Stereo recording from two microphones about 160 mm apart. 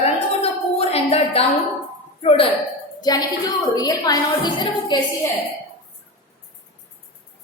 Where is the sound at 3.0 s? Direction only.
25° left (ahead or behind).